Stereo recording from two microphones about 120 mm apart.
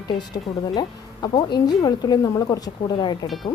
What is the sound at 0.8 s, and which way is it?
A woman's voice, 35° left (ahead or behind).